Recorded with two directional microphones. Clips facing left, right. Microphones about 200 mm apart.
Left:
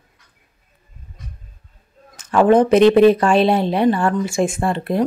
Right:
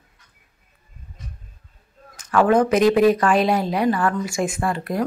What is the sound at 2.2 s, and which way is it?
Speech, 25° left (ahead or behind).